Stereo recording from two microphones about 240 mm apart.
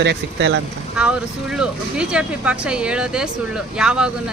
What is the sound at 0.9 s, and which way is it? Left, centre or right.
A woman's voice, centre.